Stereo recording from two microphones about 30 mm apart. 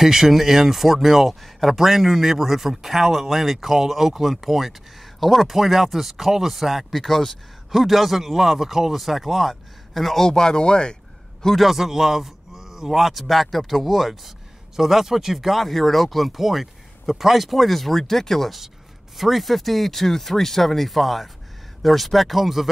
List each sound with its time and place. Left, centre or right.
0.0 s speech: centre
1.4 s speech: centre
1.8 s speech: centre
10.2 s speech: left
11.5 s speech: centre
15.6 s speech: centre
19.1 s speech: centre